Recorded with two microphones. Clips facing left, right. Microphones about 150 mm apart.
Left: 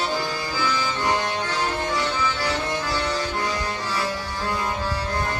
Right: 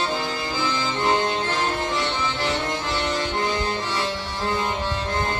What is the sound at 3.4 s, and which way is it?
Music, 25° right (ahead or behind).